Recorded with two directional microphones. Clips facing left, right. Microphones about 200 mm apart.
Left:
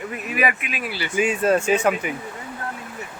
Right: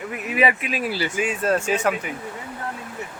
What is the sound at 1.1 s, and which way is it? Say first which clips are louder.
Speech: left 6 dB; centre (ahead or behind).